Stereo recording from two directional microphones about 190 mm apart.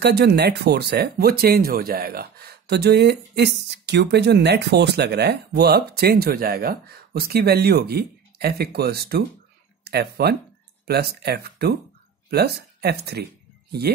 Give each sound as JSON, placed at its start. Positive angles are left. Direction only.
{"t": 0.0, "sound": "speech", "side_deg": -60}